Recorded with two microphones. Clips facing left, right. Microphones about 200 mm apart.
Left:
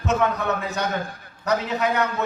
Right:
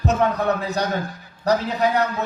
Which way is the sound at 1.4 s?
35° right (ahead or behind).